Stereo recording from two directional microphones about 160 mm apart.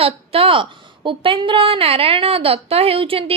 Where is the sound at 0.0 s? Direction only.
35° right (ahead or behind).